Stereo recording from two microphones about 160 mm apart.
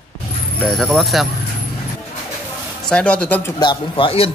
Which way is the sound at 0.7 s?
Centre (ahead or behind).